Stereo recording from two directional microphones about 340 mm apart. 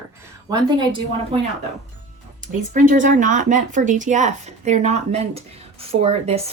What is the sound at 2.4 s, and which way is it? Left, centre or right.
Speech, right.